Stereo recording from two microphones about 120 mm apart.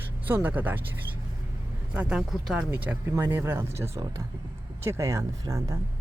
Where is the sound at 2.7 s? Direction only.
20° right (ahead or behind).